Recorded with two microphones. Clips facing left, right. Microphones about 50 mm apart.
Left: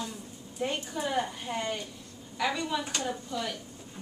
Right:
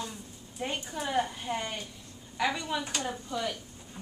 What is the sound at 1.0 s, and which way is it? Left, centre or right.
A woman's voice, centre.